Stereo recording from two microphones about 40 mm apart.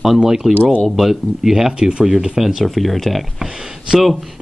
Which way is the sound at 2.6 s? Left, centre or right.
Centre.